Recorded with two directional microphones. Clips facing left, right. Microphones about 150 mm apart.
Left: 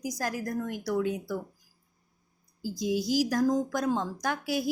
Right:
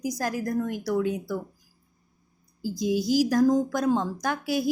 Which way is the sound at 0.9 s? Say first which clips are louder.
Even; 65° right (ahead or behind).